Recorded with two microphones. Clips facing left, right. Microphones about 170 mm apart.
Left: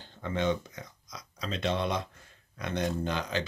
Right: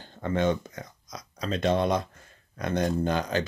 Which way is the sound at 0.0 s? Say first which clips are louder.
Right 4 dB; 50° right (ahead or behind).